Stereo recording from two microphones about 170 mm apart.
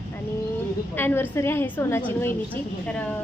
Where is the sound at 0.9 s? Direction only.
10° left (ahead or behind).